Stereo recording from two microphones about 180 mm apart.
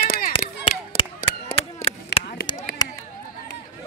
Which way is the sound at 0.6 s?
30° left (ahead or behind).